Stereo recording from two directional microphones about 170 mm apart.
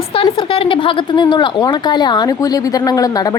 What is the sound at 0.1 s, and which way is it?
A woman's voice, 30° left (ahead or behind).